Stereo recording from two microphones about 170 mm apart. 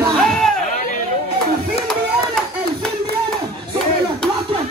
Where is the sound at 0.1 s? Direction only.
Centre (ahead or behind).